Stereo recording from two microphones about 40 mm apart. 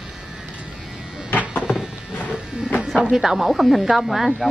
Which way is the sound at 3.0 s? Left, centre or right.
Centre.